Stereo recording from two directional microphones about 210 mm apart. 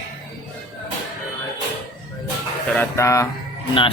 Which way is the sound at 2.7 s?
10° left (ahead or behind).